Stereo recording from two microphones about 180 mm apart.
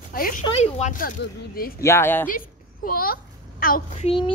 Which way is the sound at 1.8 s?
15° left (ahead or behind).